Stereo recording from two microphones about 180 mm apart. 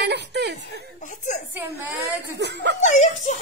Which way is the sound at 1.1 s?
40° left (ahead or behind).